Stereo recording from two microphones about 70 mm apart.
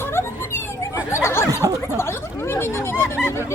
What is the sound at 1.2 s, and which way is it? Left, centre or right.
Snicker, left.